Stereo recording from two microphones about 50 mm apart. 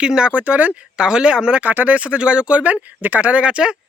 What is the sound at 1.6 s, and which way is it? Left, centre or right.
Speech, right.